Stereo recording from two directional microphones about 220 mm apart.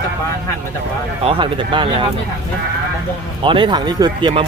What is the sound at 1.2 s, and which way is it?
Speech, 25° right (ahead or behind).